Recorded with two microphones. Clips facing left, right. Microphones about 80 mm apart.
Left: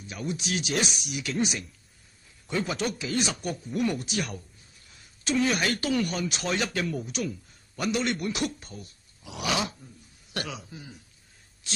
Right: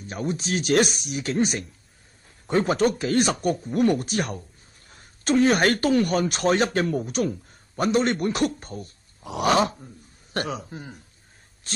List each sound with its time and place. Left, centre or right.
0.0 s speech: right